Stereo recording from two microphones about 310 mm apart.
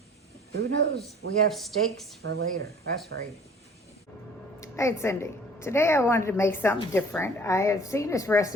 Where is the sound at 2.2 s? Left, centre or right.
Right.